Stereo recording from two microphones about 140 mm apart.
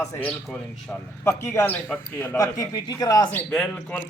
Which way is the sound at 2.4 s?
25° left (ahead or behind).